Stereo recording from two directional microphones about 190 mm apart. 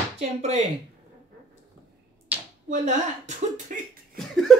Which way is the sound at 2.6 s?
40° right (ahead or behind).